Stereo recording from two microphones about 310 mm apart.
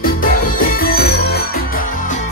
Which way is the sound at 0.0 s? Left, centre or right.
Left.